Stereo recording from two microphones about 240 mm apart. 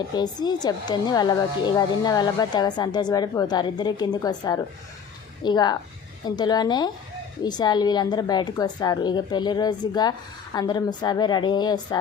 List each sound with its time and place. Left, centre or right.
0.1 s speech: centre